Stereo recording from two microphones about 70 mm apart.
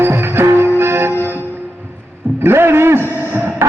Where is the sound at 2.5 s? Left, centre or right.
Right.